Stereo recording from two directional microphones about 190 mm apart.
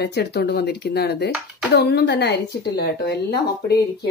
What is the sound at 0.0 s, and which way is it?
Speech, 60° left (ahead or behind).